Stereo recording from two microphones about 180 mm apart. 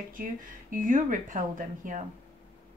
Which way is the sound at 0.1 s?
50° right (ahead or behind).